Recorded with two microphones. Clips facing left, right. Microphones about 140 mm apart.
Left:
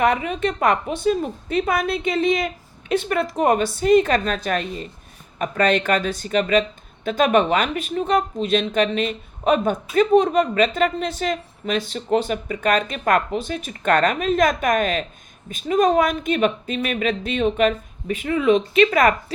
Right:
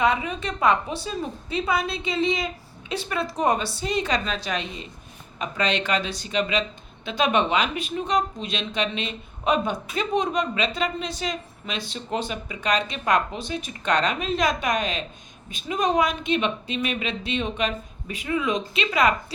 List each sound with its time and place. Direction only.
0.0 s a woman's voice: 55° left (ahead or behind)